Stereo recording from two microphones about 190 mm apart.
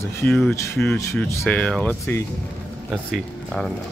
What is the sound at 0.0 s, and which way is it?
Speech, 10° left (ahead or behind).